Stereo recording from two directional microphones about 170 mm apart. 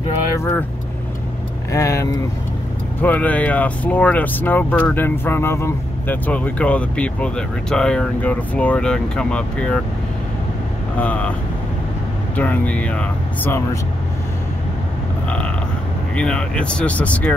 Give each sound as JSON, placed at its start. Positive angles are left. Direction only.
{"t": 1.7, "sound": "speech", "side_deg": 20}
{"t": 11.0, "sound": "speech", "side_deg": 10}
{"t": 12.4, "sound": "speech", "side_deg": 10}
{"t": 15.2, "sound": "creak", "side_deg": 5}
{"t": 16.2, "sound": "speech", "side_deg": 5}